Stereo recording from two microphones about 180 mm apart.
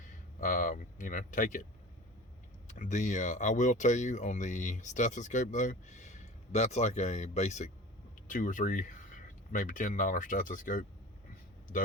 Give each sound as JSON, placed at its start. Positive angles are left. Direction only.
{"t": 0.3, "sound": "speech", "side_deg": 50}
{"t": 2.6, "sound": "speech", "side_deg": 45}